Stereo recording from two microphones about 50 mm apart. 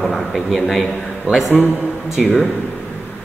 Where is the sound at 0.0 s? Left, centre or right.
Centre.